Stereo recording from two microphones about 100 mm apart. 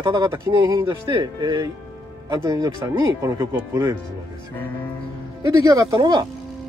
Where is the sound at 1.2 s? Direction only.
40° right (ahead or behind).